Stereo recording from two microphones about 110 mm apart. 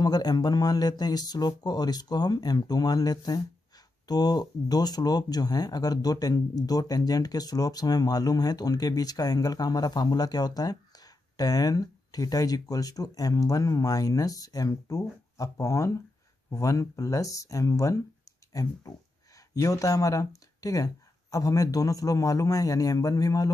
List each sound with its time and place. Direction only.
0.0 s speech: 35° left (ahead or behind)